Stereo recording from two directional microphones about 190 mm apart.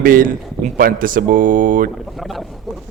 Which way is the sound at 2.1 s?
Centre (ahead or behind).